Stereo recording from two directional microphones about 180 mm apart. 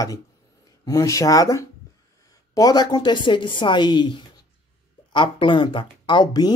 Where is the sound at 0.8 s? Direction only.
20° left (ahead or behind).